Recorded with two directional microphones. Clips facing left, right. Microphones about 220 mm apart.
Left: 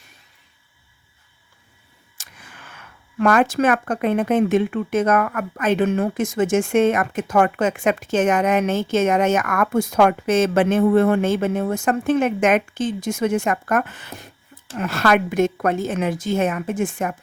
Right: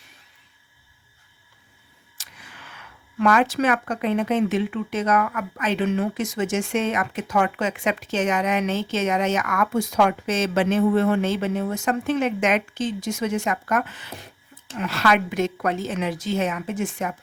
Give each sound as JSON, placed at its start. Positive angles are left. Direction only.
{"t": 2.1, "sound": "speech", "side_deg": 50}